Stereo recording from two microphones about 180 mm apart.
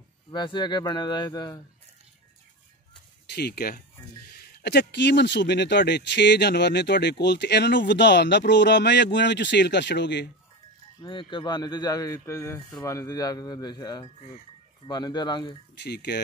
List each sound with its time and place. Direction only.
0.3 s speech: 25° left (ahead or behind)
3.3 s speech: 65° left (ahead or behind)
11.0 s speech: 25° left (ahead or behind)
15.7 s speech: 70° left (ahead or behind)